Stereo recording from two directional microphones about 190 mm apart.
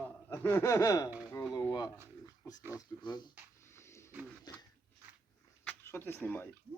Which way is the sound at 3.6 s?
15° left (ahead or behind).